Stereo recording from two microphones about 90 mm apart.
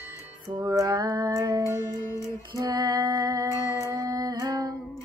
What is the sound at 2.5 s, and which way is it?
Music, 45° right (ahead or behind).